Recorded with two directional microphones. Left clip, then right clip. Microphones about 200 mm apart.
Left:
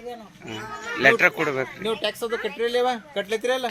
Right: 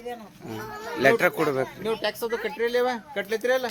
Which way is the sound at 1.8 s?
55° left (ahead or behind).